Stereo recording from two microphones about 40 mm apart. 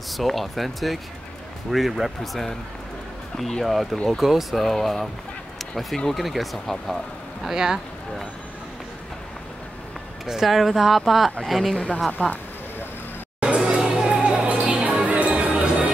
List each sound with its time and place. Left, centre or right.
0.2 s speech: centre
5.6 s a sound: centre
6.0 s speech: centre
7.4 s speech: centre
10.2 s speech: centre
12.2 s speech: left
13.4 s music: right